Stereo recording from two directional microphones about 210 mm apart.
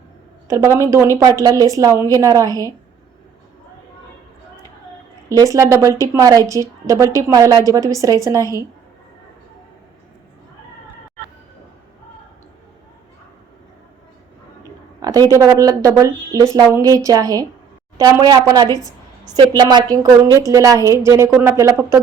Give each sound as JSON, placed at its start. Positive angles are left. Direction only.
{"t": 0.4, "sound": "a woman's voice", "side_deg": -15}
{"t": 5.3, "sound": "a woman's voice", "side_deg": -15}
{"t": 15.0, "sound": "a woman's voice", "side_deg": -15}